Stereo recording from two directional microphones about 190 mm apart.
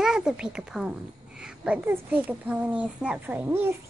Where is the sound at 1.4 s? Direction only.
5° right (ahead or behind).